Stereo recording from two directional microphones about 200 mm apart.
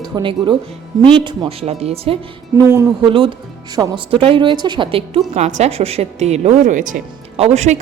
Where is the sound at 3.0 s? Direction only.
25° right (ahead or behind).